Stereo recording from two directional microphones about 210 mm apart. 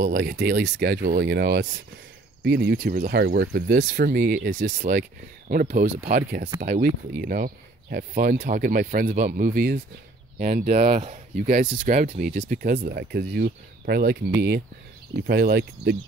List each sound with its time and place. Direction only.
0.0 s speech: 50° right (ahead or behind)